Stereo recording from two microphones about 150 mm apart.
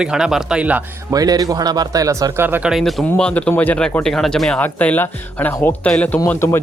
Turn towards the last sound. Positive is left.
turn(degrees=15)  # may be behind; listen again after turning